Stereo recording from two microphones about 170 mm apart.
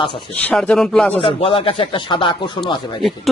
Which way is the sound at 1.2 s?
35° left (ahead or behind).